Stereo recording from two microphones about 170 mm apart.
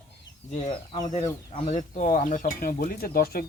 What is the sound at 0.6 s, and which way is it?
Speech, 30° left (ahead or behind).